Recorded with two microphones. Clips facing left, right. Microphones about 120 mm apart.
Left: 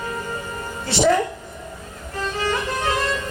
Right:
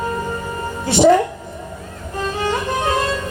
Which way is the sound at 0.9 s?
20° right (ahead or behind).